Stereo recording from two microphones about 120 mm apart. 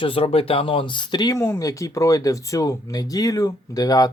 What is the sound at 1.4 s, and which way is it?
Speech, 25° left (ahead or behind).